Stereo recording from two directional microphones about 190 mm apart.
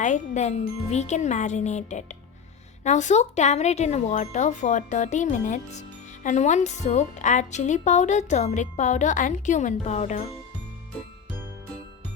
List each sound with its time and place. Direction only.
0.0 s speech: 40° left (ahead or behind)